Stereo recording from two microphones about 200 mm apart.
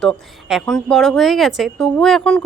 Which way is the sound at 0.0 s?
Centre (ahead or behind).